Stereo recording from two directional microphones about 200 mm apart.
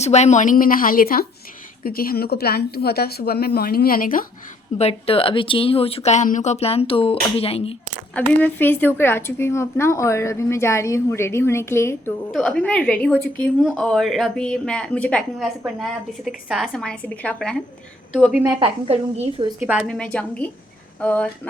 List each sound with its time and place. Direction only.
0.0 s speech: 35° left (ahead or behind)
4.8 s speech: 30° left (ahead or behind)
8.1 s a woman's voice: 10° left (ahead or behind)
18.4 s a woman's voice: 30° right (ahead or behind)
19.6 s a woman's voice: centre (ahead or behind)